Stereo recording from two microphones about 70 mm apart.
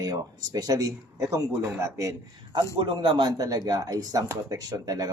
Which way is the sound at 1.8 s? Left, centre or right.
Right.